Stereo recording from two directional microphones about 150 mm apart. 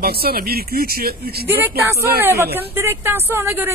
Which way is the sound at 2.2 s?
15° right (ahead or behind).